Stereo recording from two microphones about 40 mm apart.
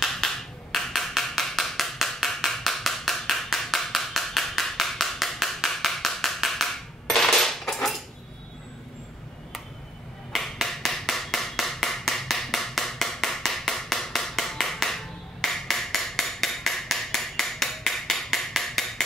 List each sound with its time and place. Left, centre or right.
0.2 s a sound: centre
7.1 s coin: centre
10.4 s hammer: centre